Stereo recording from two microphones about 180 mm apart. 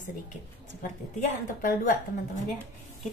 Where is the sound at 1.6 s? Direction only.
50° left (ahead or behind).